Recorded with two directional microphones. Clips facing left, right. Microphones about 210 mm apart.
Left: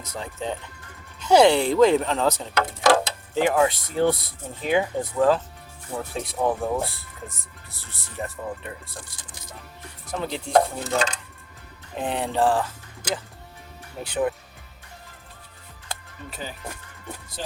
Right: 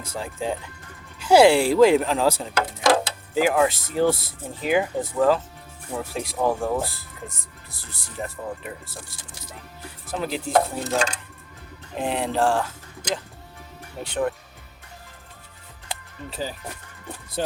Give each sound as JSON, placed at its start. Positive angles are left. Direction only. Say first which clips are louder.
{"t": 0.2, "sound": "speech", "louder": "right 2 dB", "side_deg": -5}
{"t": 10.1, "sound": "speech", "louder": "even", "side_deg": -5}
{"t": 16.3, "sound": "speech", "louder": "right 5 dB", "side_deg": -35}